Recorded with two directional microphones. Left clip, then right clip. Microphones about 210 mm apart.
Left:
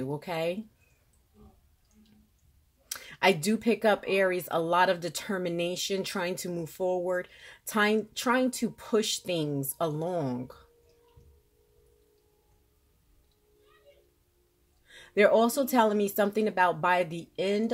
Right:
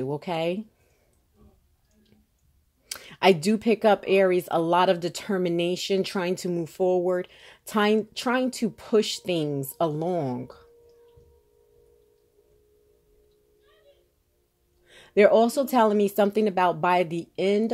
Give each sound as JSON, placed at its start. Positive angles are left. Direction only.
{"t": 0.0, "sound": "speech", "side_deg": -35}
{"t": 2.9, "sound": "speech", "side_deg": -35}
{"t": 14.9, "sound": "speech", "side_deg": -35}